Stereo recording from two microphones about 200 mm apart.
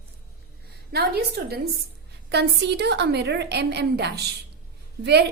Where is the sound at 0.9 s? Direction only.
50° right (ahead or behind).